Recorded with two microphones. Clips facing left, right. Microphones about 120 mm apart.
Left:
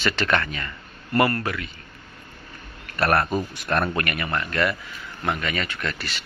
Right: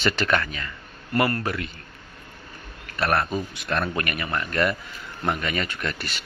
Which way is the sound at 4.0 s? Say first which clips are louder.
Left 1 dB; 25° right (ahead or behind).